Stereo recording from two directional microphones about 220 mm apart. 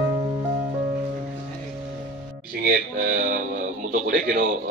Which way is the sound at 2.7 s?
40° right (ahead or behind).